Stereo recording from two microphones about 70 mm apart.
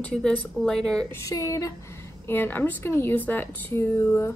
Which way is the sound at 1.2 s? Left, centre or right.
Left.